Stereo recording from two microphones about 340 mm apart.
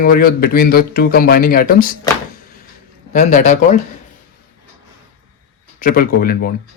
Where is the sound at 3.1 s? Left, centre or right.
Left.